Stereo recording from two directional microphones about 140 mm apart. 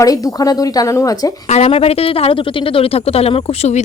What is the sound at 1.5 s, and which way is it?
A woman's voice, 50° left (ahead or behind).